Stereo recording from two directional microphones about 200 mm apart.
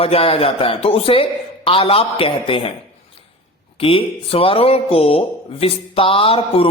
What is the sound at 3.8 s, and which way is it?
Speech, 25° left (ahead or behind).